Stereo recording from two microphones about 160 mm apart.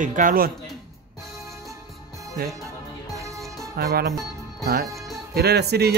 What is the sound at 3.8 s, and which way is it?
Speech, 75° right (ahead or behind).